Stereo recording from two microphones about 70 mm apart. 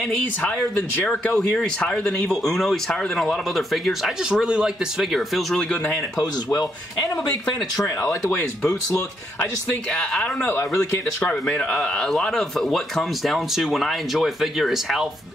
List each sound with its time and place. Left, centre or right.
0.0 s speech: centre
1.3 s a man's voice: centre
6.1 s speech: left
7.8 s speech: left
9.4 s speech: centre
10.6 s speech: left
11.4 s a man's voice: centre